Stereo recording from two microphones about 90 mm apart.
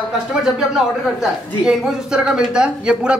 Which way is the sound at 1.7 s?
10° right (ahead or behind).